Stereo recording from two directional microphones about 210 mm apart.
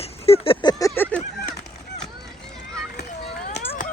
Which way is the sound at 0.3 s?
25° left (ahead or behind).